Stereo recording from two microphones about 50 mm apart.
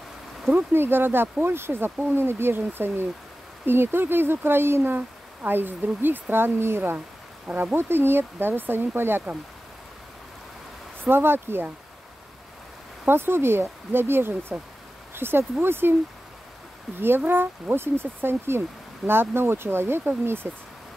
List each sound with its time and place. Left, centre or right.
0.5 s speech: right
4.9 s speech: right
6.3 s speech: right
11.1 s speech: right
13.0 s speech: right
17.3 s speech: right